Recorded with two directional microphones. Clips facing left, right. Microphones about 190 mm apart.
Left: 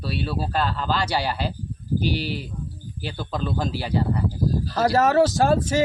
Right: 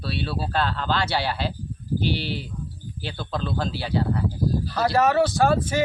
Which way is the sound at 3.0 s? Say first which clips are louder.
Left 1 dB; 10° left (ahead or behind).